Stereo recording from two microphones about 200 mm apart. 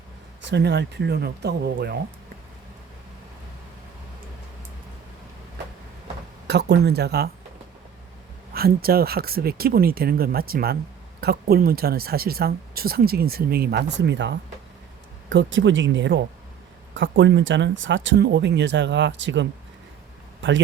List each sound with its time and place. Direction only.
0.4 s speech: 55° right (ahead or behind)
6.5 s speech: 55° right (ahead or behind)
8.5 s speech: 50° right (ahead or behind); by 20.6 s 70° right (ahead or behind)